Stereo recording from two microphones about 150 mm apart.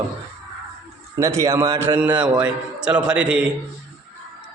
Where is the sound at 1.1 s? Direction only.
20° right (ahead or behind).